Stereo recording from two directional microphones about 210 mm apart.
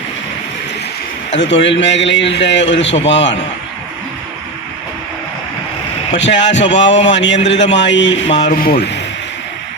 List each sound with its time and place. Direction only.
1.3 s a man's voice: 60° left (ahead or behind)
6.1 s a man's voice: 60° left (ahead or behind)
8.4 s speech: 40° left (ahead or behind)